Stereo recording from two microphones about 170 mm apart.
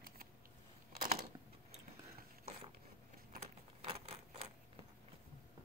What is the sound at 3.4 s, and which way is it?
Keys jangling, 35° right (ahead or behind).